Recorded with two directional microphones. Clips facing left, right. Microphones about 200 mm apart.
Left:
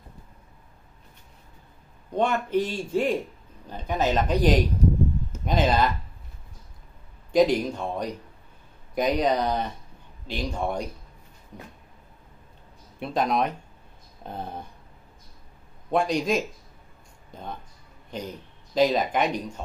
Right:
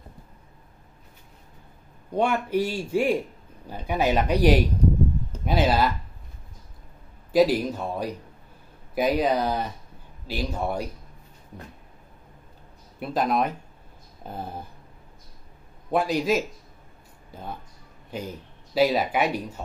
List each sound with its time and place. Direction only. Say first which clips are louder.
2.1 s a man's voice: even; 10° right (ahead or behind)
7.3 s a man's voice: even; 5° right (ahead or behind)
13.0 s speech: even; centre (ahead or behind)
15.9 s speech: right 1 dB; 5° right (ahead or behind)